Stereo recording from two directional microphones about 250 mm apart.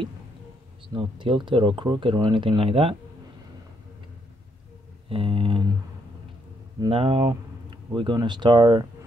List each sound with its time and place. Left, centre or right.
0.9 s speech: centre
5.1 s speech: right
6.8 s speech: right